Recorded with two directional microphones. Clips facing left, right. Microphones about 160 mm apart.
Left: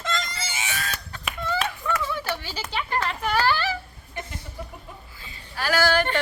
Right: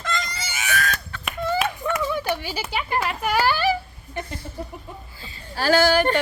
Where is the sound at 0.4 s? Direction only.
25° left (ahead or behind).